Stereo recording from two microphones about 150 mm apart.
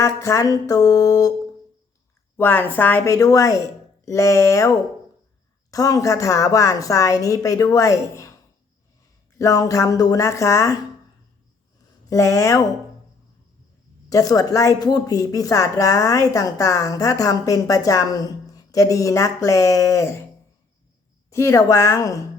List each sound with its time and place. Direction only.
0.0 s speech: 20° left (ahead or behind)
2.4 s speech: 15° left (ahead or behind)
9.4 s speech: 25° left (ahead or behind)
12.0 s speech: 20° left (ahead or behind)
14.1 s speech: 25° left (ahead or behind)
21.2 s speech: 20° left (ahead or behind)